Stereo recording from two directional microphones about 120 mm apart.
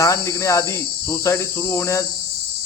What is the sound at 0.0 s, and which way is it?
Cricket, 25° left (ahead or behind).